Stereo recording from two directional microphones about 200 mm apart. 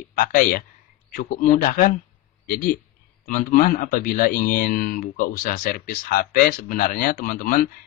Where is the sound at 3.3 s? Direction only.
40° left (ahead or behind).